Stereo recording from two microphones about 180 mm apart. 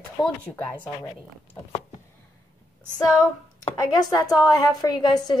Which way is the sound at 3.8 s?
20° left (ahead or behind).